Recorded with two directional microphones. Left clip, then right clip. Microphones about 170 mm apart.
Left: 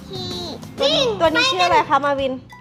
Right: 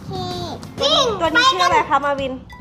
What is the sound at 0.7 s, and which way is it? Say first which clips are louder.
Speech: right 1 dB; centre (ahead or behind).